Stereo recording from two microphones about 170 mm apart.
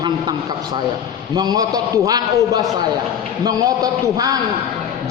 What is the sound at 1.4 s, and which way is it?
A man's voice, 20° right (ahead or behind).